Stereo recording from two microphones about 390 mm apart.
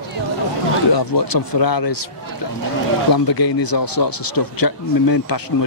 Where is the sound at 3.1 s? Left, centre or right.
Left.